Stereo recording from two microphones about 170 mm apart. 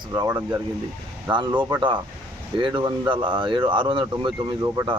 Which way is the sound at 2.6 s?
30° right (ahead or behind).